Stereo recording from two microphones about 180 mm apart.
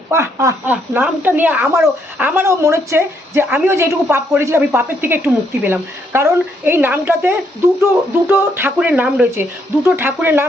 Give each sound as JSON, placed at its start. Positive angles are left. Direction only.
{"t": 0.1, "sound": "speech", "side_deg": -15}